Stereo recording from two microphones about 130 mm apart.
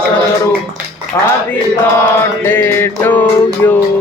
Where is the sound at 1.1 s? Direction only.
25° left (ahead or behind).